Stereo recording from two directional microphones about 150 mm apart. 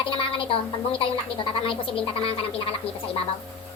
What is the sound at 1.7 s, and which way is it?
A woman's voice, 35° left (ahead or behind).